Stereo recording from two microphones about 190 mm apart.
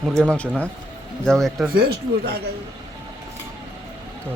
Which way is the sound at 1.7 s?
55° right (ahead or behind).